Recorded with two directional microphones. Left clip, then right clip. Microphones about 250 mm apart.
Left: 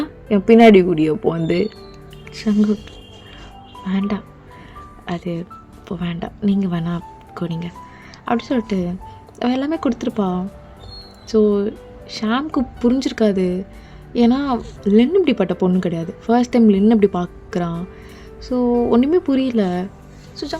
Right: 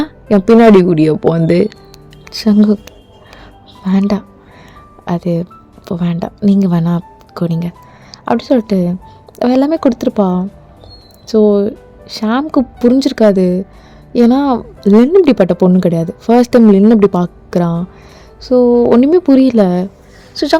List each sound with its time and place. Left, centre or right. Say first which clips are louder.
0.0 s a woman's voice: right 7 dB; right
3.8 s a woman's voice: right 9 dB; right